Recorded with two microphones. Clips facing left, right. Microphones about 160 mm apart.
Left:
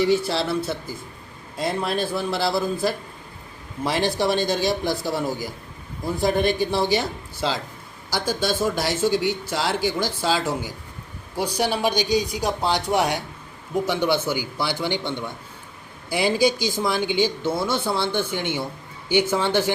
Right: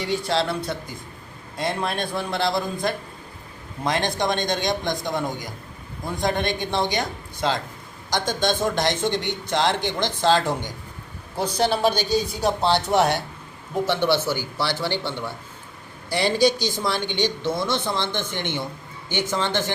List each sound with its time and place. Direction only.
0.1 s a man's voice: 5° left (ahead or behind)